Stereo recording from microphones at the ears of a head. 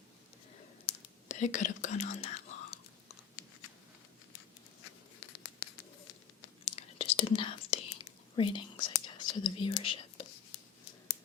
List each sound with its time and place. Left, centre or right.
0.9 s whispering: left
4.8 s patter: left
8.7 s whispering: left